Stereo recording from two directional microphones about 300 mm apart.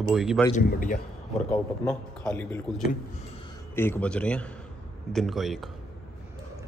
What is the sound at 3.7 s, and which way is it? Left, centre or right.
Speech, centre.